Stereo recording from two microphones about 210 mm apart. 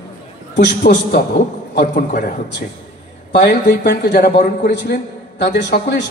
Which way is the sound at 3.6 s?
50° left (ahead or behind).